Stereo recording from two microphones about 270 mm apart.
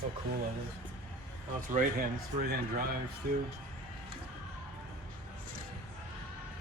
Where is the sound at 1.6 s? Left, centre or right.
Right.